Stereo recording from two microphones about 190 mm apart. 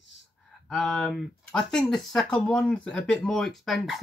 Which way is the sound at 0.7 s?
Centre (ahead or behind).